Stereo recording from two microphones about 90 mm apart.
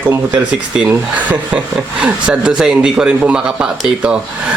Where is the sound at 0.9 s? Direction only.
15° right (ahead or behind).